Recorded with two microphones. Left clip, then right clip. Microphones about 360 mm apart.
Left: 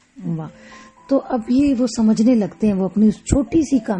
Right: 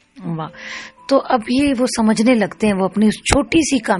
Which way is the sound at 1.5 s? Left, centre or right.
Right.